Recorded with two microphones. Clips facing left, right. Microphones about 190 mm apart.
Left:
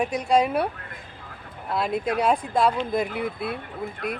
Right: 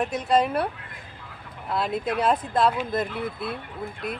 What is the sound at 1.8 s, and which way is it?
Speech, 10° left (ahead or behind).